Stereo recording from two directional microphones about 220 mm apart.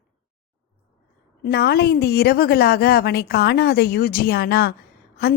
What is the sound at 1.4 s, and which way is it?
A woman's voice, 45° left (ahead or behind).